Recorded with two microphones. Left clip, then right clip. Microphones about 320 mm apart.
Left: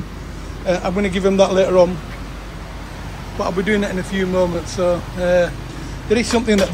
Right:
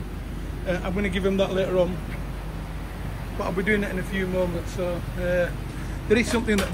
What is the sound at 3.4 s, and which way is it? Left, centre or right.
A man's voice, centre.